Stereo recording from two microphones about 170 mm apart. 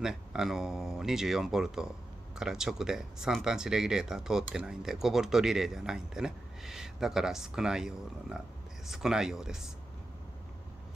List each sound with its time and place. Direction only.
0.0 s speech: 5° right (ahead or behind)